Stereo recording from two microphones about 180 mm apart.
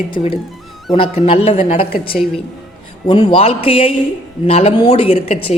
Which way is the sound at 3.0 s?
30° left (ahead or behind).